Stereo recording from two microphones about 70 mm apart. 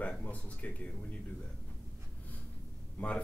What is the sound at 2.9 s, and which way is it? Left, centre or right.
Speech, centre.